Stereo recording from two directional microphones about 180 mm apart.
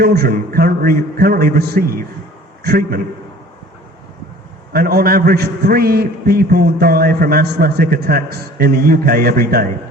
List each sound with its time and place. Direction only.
0.0 s a man's voice: 60° right (ahead or behind)
4.7 s a man's voice: 60° right (ahead or behind)